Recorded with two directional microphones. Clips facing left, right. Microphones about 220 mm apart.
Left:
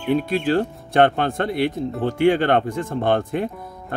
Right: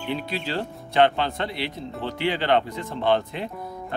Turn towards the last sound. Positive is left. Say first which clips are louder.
# left 3 dB
turn(degrees=50)  # may be behind; listen again after turning